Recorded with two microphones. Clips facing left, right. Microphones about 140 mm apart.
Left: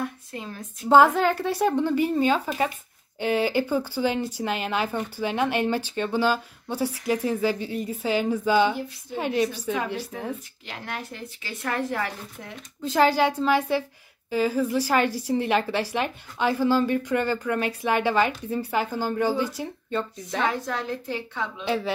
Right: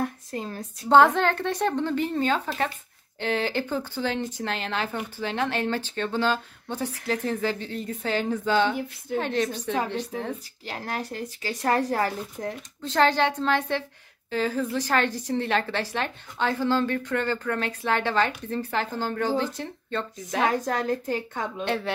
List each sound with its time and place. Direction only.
0.0 s a sound: 40° right (ahead or behind)
0.8 s a woman's voice: 5° left (ahead or behind)
10.7 s speech: 40° right (ahead or behind)
12.8 s a woman's voice: 10° left (ahead or behind)
20.4 s a woman's voice: 45° right (ahead or behind)
21.6 s speech: centre (ahead or behind)